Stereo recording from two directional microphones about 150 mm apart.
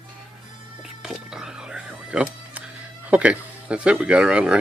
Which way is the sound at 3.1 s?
10° right (ahead or behind).